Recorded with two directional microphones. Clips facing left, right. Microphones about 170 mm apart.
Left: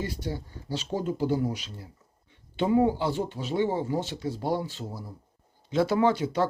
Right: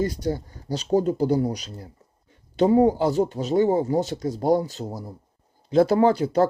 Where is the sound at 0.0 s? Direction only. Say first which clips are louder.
Right 8 dB; 40° right (ahead or behind).